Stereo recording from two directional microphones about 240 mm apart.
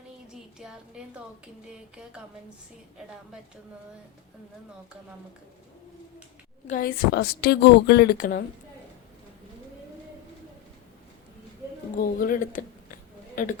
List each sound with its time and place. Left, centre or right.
0.6 s a woman's voice: centre
6.7 s a woman's voice: left
11.9 s a woman's voice: left